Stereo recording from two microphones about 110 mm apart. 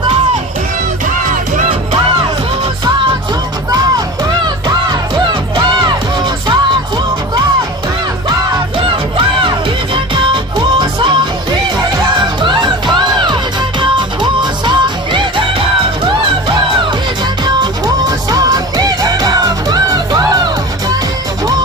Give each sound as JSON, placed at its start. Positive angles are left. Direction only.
{"t": 5.3, "sound": "music", "side_deg": -45}
{"t": 9.9, "sound": "music", "side_deg": -50}
{"t": 12.4, "sound": "music", "side_deg": -45}
{"t": 17.4, "sound": "music", "side_deg": -40}